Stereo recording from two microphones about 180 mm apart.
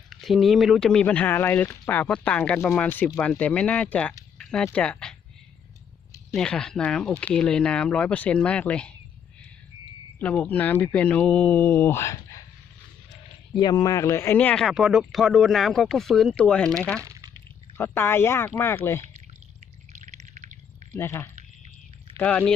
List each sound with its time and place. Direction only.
0.1 s speech: centre (ahead or behind)
6.3 s speech: 5° left (ahead or behind)
10.2 s speech: 10° left (ahead or behind)
13.6 s speech: 20° left (ahead or behind); by 16.6 s 5° left (ahead or behind)
17.0 s drip: 15° right (ahead or behind)
17.7 s speech: 10° left (ahead or behind)
19.9 s a sound: 40° right (ahead or behind)
20.9 s speech: 15° left (ahead or behind)